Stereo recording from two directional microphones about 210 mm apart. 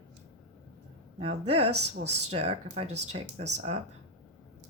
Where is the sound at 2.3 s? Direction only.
30° right (ahead or behind).